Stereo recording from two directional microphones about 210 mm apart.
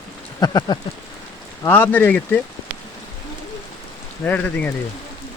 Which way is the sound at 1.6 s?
10° left (ahead or behind).